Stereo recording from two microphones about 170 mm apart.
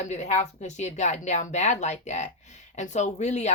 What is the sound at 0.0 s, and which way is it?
Speech, 40° left (ahead or behind).